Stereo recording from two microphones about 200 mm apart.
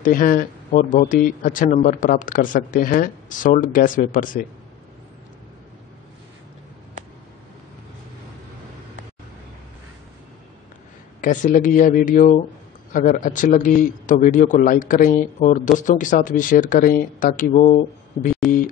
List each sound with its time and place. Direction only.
0.0 s a man's voice: 45° left (ahead or behind)
11.1 s a man's voice: 40° left (ahead or behind)